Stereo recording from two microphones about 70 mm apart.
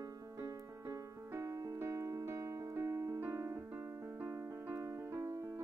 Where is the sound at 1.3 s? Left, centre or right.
Right.